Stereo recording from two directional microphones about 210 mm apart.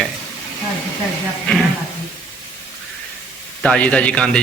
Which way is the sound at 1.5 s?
5° left (ahead or behind).